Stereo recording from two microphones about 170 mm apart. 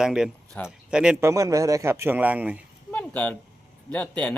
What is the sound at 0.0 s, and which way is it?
A man's voice, 5° right (ahead or behind).